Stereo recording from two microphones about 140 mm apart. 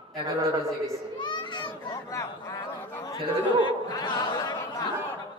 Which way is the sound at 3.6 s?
30° left (ahead or behind).